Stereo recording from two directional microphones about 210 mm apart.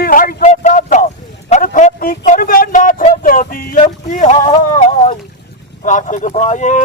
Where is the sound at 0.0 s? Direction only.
40° left (ahead or behind).